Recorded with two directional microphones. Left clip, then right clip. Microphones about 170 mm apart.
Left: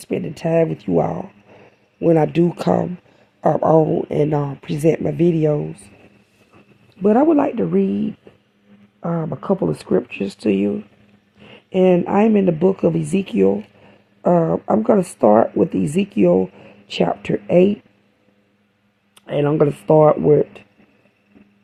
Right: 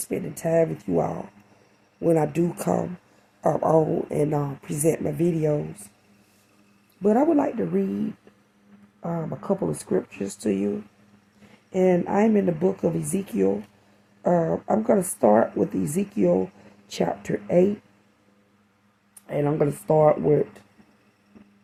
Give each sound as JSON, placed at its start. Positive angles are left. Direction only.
{"t": 0.0, "sound": "speech", "side_deg": 55}
{"t": 7.0, "sound": "speech", "side_deg": 55}
{"t": 19.2, "sound": "speech", "side_deg": 55}